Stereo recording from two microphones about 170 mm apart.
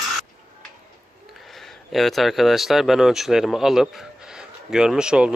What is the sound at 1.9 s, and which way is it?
Speech, centre (ahead or behind).